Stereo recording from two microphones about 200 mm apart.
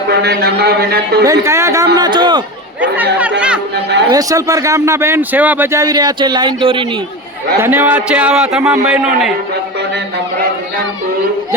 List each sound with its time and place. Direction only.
0.1 s speech: 55° right (ahead or behind)
1.2 s a man's voice: 15° right (ahead or behind)
4.1 s speech: 15° right (ahead or behind)
7.6 s a man's voice: 10° right (ahead or behind)